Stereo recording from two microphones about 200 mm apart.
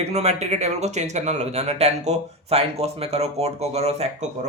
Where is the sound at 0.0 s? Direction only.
30° right (ahead or behind).